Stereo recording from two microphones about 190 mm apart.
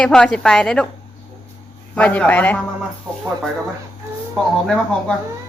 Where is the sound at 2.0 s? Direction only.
10° left (ahead or behind).